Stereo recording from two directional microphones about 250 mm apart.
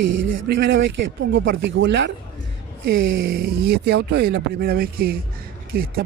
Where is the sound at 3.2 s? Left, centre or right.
Right.